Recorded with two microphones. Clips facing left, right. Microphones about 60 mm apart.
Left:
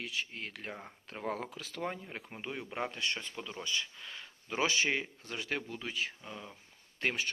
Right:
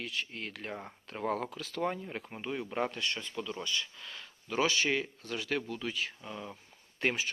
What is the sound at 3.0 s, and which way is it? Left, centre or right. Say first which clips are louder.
Speech: right 1 dB; left.